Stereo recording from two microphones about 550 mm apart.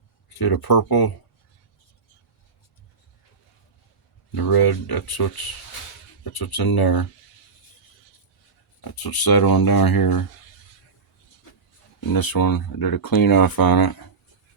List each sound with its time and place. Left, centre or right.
0.3 s speech: left
4.4 s speech: left
6.3 s speech: left
8.8 s speech: left
11.9 s speech: left